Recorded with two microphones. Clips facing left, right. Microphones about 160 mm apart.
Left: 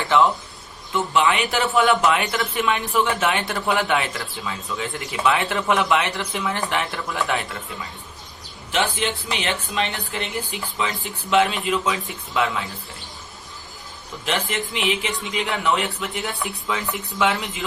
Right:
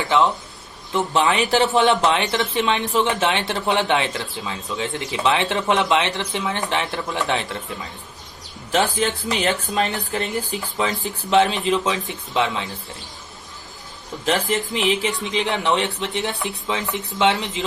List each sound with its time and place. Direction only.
0.1 s speech: 20° right (ahead or behind)
1.1 s speech: 35° right (ahead or behind)
8.7 s speech: 40° right (ahead or behind); by 12.7 s 25° right (ahead or behind)
14.3 s speech: 35° right (ahead or behind)